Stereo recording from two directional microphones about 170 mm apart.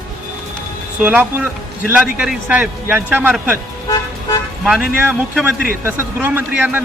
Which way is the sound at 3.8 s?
20° left (ahead or behind).